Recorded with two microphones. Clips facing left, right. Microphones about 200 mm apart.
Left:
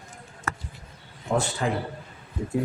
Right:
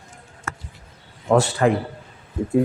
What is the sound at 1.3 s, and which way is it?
Speech, 75° right (ahead or behind).